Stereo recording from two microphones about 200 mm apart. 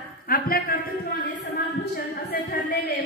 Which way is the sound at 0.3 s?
45° left (ahead or behind).